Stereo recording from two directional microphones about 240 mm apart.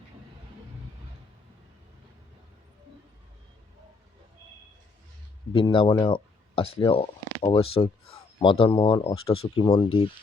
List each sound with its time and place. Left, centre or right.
5.5 s speech: left